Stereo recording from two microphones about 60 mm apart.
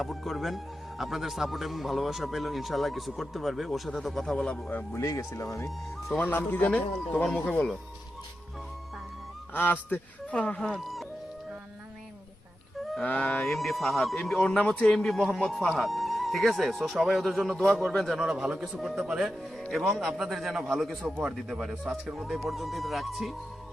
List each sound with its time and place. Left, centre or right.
0.0 s a man's voice: centre
4.9 s speech: left
6.2 s a man's voice: left
9.5 s a man's voice: left
10.3 s a man's voice: centre
10.6 s a man's voice: centre
13.1 s a man's voice: left; by 14.5 s centre
14.7 s a man's voice: centre
18.2 s a man's voice: centre
19.7 s a man's voice: centre
21.0 s a man's voice: centre
21.3 s a man's voice: centre